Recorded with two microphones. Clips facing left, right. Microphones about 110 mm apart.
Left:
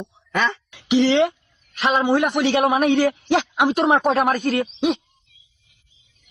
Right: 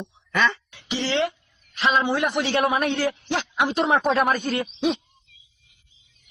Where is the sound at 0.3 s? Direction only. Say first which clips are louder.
Even; 20° left (ahead or behind).